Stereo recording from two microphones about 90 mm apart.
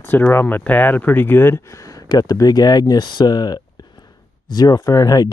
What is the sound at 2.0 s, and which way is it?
Speech, 45° left (ahead or behind).